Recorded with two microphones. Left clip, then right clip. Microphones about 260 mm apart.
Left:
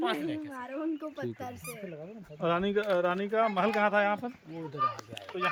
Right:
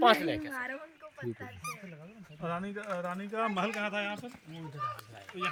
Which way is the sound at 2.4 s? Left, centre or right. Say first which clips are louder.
Left 9 dB; left.